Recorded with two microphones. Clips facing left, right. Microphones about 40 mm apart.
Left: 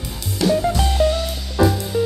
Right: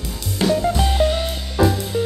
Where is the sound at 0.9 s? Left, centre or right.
Right.